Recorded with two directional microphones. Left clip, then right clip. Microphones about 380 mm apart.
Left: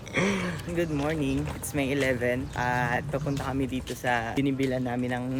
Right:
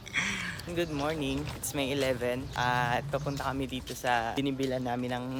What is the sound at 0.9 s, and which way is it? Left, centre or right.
Speech, centre.